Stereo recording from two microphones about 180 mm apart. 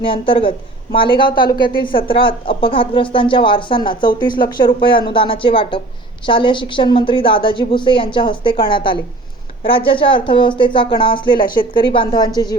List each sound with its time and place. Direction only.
0.0 s a woman's voice: 30° left (ahead or behind)